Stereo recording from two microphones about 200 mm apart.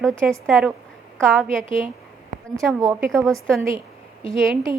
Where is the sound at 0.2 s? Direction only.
5° right (ahead or behind).